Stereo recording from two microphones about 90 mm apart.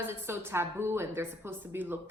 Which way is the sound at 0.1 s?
25° right (ahead or behind).